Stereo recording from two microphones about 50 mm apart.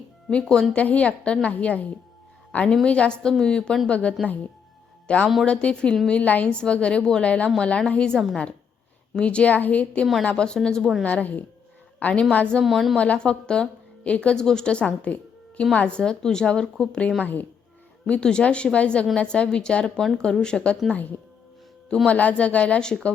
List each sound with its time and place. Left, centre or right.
0.3 s a woman's voice: left
10.2 s a woman's voice: centre
11.0 s a woman's voice: left
12.6 s a woman's voice: centre
13.0 s a woman's voice: left
18.1 s a woman's voice: centre
22.0 s a woman's voice: left